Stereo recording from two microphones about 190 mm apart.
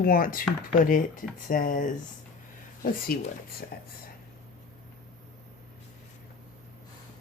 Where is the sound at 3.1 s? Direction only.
50° left (ahead or behind).